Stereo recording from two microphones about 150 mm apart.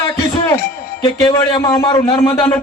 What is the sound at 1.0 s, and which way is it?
A man's voice, 25° left (ahead or behind).